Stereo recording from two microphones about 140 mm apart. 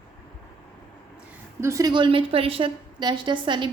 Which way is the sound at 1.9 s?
35° right (ahead or behind).